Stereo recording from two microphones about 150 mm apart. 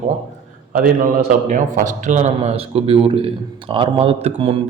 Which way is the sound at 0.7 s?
70° right (ahead or behind).